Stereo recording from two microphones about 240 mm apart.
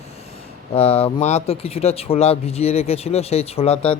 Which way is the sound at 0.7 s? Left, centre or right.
Left.